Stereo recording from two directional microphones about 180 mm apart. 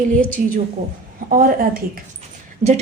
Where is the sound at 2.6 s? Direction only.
35° right (ahead or behind).